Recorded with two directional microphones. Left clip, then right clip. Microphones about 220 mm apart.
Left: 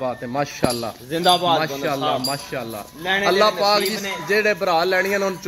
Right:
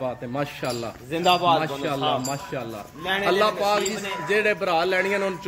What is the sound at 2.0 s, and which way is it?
Speech, 30° left (ahead or behind).